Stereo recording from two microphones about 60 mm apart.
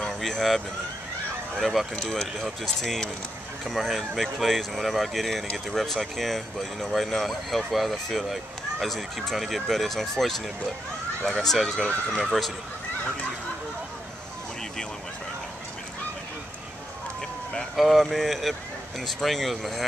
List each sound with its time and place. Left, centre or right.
0.0 s vehicle: centre
1.6 s speech: centre
12.1 s speech: centre
17.7 s speech: centre